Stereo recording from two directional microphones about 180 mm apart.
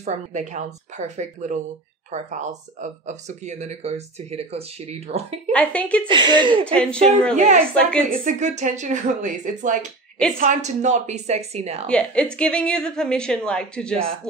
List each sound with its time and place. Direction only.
0.0 s speech: 40° right (ahead or behind)
5.5 s speech: 5° left (ahead or behind)
6.0 s speech: 25° right (ahead or behind)
6.6 s speech: 5° left (ahead or behind)
7.3 s speech: 45° right (ahead or behind)
11.9 s a woman's voice: 5° left (ahead or behind)